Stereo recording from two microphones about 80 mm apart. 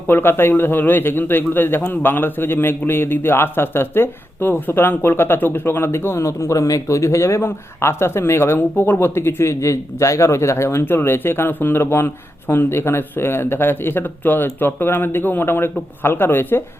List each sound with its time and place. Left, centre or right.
0.1 s a man's voice: left